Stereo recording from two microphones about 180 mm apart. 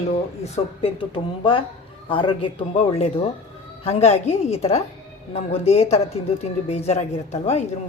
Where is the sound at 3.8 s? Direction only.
35° left (ahead or behind).